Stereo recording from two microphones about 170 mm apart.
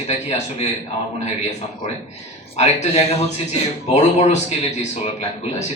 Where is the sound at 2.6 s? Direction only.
40° left (ahead or behind).